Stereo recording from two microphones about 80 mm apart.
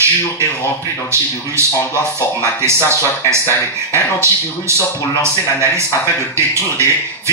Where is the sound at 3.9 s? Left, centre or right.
Right.